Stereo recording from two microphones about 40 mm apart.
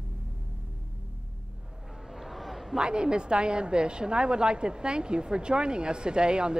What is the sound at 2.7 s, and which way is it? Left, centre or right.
A woman's voice, right.